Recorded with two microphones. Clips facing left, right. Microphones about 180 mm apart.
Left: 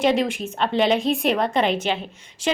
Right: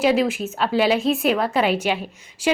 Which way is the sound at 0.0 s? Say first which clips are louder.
Right 1 dB; 5° right (ahead or behind).